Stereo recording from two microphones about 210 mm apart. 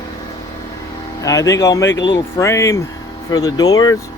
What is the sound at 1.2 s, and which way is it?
Speech, 15° left (ahead or behind).